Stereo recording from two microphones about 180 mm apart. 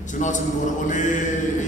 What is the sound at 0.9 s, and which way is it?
Mantra, 45° left (ahead or behind).